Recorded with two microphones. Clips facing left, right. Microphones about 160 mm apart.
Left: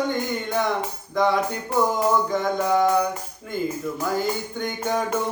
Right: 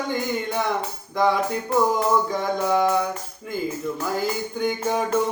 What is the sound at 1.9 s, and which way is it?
Music, centre (ahead or behind).